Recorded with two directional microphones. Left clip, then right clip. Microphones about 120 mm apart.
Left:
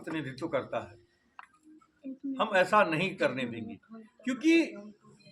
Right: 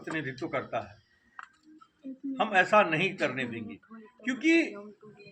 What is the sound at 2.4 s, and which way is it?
Speech, 30° left (ahead or behind).